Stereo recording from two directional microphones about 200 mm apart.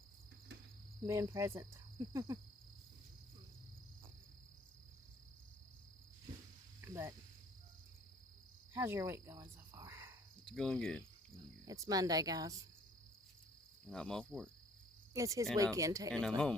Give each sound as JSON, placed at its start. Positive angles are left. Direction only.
{"t": 1.0, "sound": "cricket", "side_deg": -15}
{"t": 6.8, "sound": "cricket", "side_deg": -15}
{"t": 8.7, "sound": "cricket", "side_deg": -10}
{"t": 10.4, "sound": "cricket", "side_deg": 5}
{"t": 11.6, "sound": "cricket", "side_deg": -15}
{"t": 13.8, "sound": "cricket", "side_deg": 5}
{"t": 15.1, "sound": "speech", "side_deg": -15}
{"t": 15.5, "sound": "cricket", "side_deg": -15}